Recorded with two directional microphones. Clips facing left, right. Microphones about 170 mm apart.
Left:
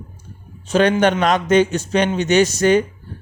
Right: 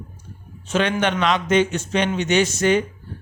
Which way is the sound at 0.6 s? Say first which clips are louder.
Left 6 dB; 40° left (ahead or behind).